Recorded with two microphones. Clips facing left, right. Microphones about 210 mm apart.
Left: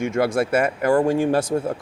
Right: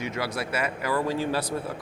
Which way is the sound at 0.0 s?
50° left (ahead or behind).